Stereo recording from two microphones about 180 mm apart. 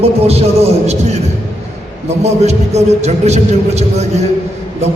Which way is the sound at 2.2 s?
35° right (ahead or behind).